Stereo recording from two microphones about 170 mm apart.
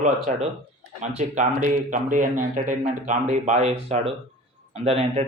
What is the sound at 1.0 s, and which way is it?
Speech, 45° right (ahead or behind).